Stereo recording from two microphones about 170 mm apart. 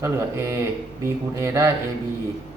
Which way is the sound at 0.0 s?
15° right (ahead or behind).